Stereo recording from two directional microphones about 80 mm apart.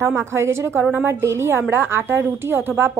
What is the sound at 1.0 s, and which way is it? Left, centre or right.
A woman's voice, right.